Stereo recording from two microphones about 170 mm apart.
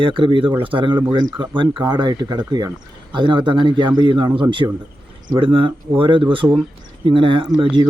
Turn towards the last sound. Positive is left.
turn(degrees=-30)  # may be behind; listen again after turning